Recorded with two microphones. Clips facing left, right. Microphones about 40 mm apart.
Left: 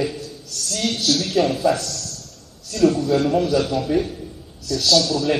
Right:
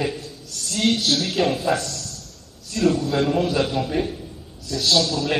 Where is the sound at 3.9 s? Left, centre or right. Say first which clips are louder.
Left 3 dB; right.